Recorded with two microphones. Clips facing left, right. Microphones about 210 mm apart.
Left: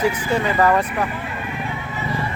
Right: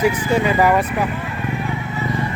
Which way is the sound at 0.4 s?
10° right (ahead or behind).